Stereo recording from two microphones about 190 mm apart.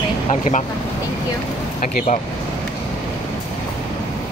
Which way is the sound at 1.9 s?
40° left (ahead or behind).